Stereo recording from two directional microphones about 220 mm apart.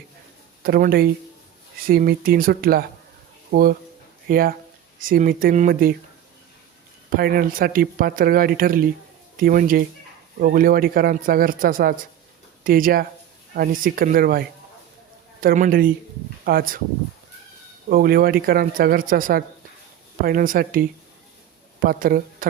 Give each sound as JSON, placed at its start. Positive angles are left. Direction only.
{"t": 0.6, "sound": "speech", "side_deg": -40}
{"t": 7.1, "sound": "speech", "side_deg": -45}
{"t": 17.8, "sound": "speech", "side_deg": -40}
{"t": 21.8, "sound": "speech", "side_deg": -40}